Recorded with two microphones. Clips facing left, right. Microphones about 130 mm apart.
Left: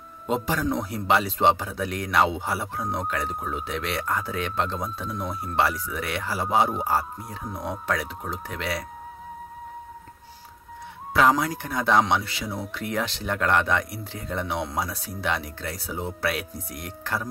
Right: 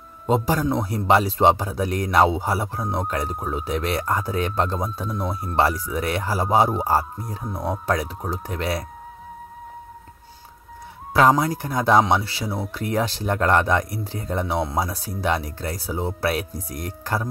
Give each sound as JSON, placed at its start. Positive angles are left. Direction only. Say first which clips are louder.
{"t": 0.3, "sound": "speech", "louder": "right 4 dB", "side_deg": -40}
{"t": 11.1, "sound": "speech", "louder": "right 3 dB", "side_deg": -40}